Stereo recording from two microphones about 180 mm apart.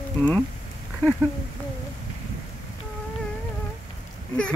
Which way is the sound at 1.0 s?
10° left (ahead or behind).